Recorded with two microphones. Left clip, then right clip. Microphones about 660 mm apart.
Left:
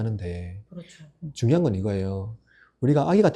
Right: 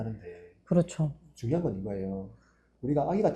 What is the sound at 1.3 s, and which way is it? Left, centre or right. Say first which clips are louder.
Speech: left 8 dB; left.